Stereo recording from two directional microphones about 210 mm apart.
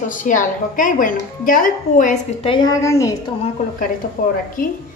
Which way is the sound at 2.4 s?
20° left (ahead or behind).